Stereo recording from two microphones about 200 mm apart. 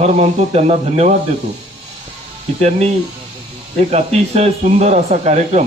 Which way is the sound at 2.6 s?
30° right (ahead or behind).